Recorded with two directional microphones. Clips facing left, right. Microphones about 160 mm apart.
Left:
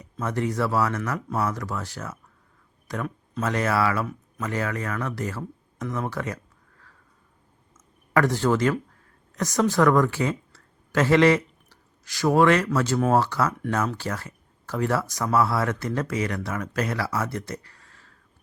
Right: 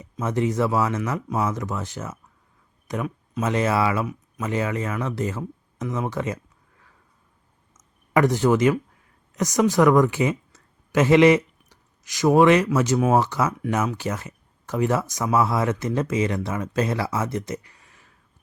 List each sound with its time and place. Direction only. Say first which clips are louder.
0.0 s speech: right 3 dB; 20° right (ahead or behind)
8.1 s speech: right 3 dB; 20° right (ahead or behind)